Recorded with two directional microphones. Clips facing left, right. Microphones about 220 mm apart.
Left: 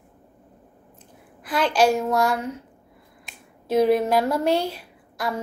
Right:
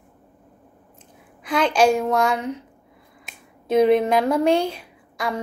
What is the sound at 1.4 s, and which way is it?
A woman's voice, 5° left (ahead or behind).